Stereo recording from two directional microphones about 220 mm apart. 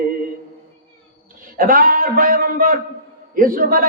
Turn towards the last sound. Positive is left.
turn(degrees=-40)  # may be behind; listen again after turning